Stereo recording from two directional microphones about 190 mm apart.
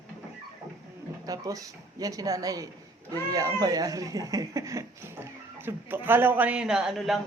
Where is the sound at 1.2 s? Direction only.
20° right (ahead or behind).